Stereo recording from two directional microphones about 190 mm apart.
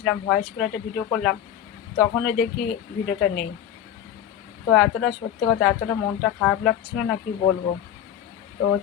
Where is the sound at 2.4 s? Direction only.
45° left (ahead or behind).